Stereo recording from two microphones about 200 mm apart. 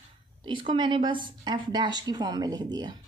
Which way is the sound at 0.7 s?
25° right (ahead or behind).